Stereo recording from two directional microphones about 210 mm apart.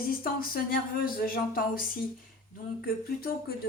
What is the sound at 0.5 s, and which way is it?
Speech, 45° left (ahead or behind).